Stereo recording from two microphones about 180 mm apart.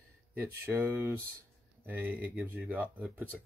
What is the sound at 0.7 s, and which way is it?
Speech, 15° right (ahead or behind).